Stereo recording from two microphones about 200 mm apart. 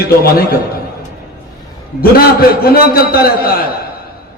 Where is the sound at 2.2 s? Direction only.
50° left (ahead or behind).